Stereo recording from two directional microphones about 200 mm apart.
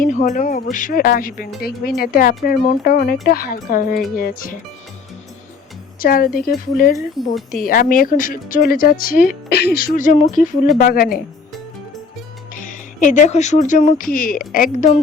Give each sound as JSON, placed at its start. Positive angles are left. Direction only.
{"t": 0.0, "sound": "speech", "side_deg": 40}
{"t": 6.0, "sound": "speech", "side_deg": 45}
{"t": 12.5, "sound": "speech", "side_deg": 40}